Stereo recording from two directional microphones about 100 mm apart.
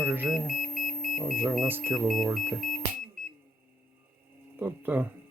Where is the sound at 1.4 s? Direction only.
5° right (ahead or behind).